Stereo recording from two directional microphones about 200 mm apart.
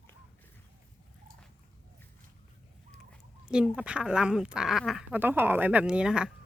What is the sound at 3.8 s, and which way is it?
Speech, 5° right (ahead or behind).